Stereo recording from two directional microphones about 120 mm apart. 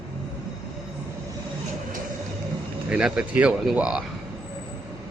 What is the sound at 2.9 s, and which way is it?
Speech, 10° right (ahead or behind).